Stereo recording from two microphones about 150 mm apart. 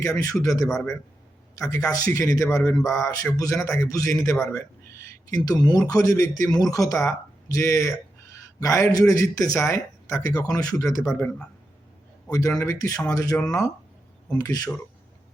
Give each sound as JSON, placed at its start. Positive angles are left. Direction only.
{"t": 0.0, "sound": "speech", "side_deg": 20}
{"t": 4.4, "sound": "a sound", "side_deg": 20}
{"t": 5.5, "sound": "speech", "side_deg": 25}
{"t": 14.3, "sound": "speech", "side_deg": 25}